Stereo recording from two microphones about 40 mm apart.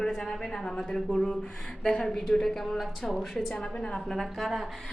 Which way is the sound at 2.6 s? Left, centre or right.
Centre.